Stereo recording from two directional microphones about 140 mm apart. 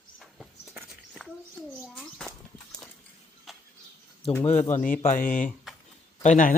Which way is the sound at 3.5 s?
Centre (ahead or behind).